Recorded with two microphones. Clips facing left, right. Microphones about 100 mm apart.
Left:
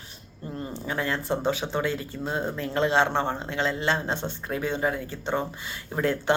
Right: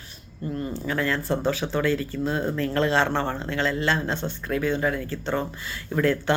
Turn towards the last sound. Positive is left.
turn(degrees=25)  # may be behind; listen again after turning